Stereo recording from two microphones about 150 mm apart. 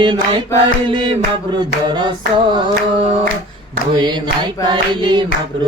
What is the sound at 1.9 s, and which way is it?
Singing, 30° right (ahead or behind).